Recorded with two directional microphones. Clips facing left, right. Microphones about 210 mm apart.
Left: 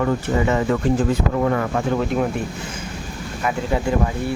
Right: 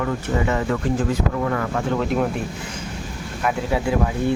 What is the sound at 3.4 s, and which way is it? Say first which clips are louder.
Speech: even; 5° right (ahead or behind).